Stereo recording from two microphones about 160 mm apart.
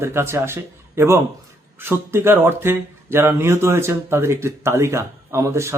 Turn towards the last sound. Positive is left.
turn(degrees=-15)  # may be behind; listen again after turning